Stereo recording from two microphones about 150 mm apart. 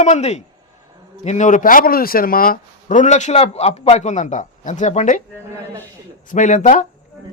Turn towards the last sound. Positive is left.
turn(degrees=55)  # may be behind; listen again after turning